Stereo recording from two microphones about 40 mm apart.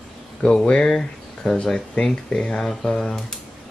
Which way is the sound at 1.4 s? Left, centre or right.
Left.